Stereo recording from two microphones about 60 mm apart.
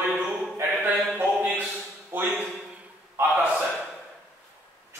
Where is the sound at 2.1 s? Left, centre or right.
Right.